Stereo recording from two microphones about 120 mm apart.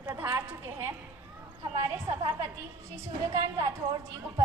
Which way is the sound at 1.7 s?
30° right (ahead or behind).